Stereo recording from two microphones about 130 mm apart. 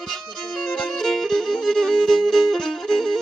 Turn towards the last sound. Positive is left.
turn(degrees=5)  # may be behind; listen again after turning